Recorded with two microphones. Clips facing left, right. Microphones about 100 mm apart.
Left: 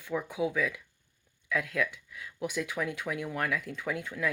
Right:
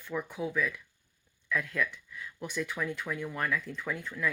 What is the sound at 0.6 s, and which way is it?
Speech, 90° left.